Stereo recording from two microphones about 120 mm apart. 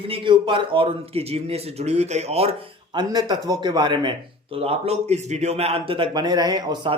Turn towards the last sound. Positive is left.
turn(degrees=-35)  # may be behind; listen again after turning